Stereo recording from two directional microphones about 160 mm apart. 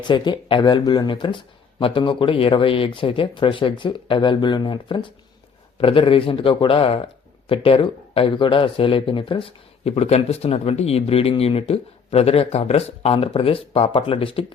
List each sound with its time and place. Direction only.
0.0 s speech: 30° left (ahead or behind)